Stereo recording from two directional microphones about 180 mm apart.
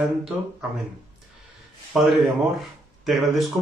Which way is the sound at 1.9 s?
Centre (ahead or behind).